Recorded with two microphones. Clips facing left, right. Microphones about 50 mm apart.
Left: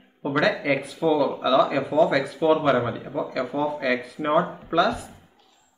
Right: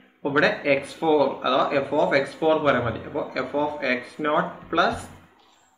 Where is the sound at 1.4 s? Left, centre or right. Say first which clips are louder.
Left 2 dB; centre.